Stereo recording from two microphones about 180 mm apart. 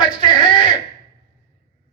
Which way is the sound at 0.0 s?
25° left (ahead or behind).